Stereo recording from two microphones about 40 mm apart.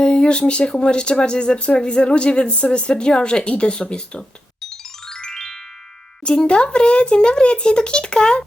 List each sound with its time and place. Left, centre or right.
0.0 s speech: left
5.0 s music: centre
6.2 s speech: left